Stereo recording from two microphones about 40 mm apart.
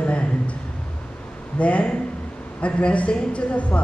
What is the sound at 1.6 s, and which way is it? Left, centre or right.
Speech, left.